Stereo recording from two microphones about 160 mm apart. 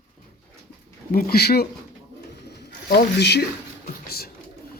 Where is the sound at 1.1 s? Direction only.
70° left (ahead or behind).